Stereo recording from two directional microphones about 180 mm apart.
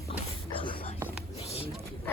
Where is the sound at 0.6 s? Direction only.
30° left (ahead or behind).